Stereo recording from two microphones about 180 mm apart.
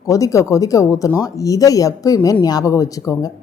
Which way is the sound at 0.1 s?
20° left (ahead or behind).